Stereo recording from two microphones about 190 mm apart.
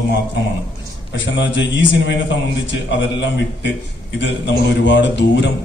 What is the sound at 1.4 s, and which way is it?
A man's voice, 70° left (ahead or behind).